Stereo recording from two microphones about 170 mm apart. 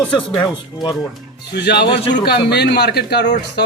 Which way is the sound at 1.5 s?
80° left.